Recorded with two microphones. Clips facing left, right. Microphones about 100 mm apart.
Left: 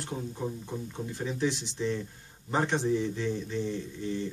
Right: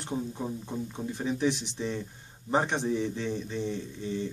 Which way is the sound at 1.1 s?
20° right (ahead or behind).